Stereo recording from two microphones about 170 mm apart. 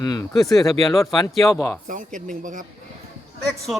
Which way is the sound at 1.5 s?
15° left (ahead or behind).